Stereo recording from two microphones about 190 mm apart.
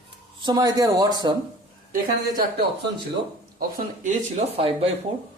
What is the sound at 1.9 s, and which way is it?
Speech, 50° right (ahead or behind).